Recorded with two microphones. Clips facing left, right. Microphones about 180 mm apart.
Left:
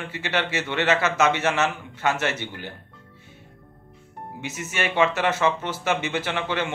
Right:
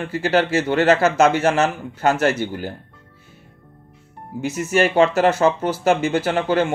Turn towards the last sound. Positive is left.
turn(degrees=-40)  # may be behind; listen again after turning